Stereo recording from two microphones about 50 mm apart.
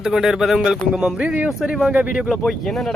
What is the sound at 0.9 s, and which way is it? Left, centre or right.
Speech, right.